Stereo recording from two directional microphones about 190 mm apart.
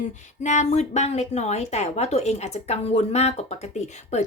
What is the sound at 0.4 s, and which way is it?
Speech, 40° left (ahead or behind).